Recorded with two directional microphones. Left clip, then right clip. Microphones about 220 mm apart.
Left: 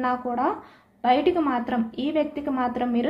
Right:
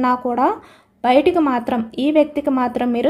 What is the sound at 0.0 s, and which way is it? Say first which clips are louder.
A woman's voice: right 7 dB; 50° right (ahead or behind).